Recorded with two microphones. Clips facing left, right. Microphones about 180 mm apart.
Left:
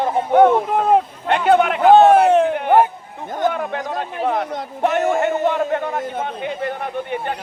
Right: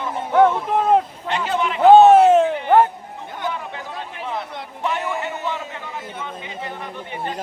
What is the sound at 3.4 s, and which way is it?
A man's voice, 55° left (ahead or behind).